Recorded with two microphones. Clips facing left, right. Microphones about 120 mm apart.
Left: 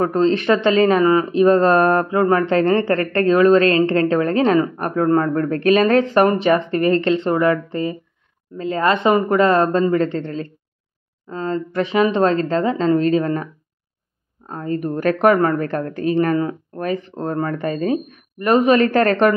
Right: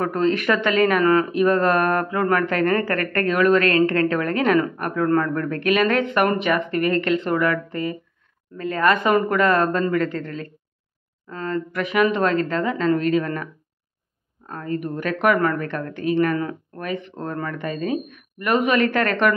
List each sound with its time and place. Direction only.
0.0 s speech: 30° left (ahead or behind)